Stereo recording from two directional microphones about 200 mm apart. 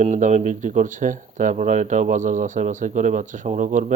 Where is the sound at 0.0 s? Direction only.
35° right (ahead or behind).